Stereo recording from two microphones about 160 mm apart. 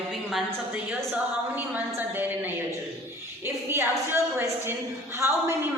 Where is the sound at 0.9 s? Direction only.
10° right (ahead or behind).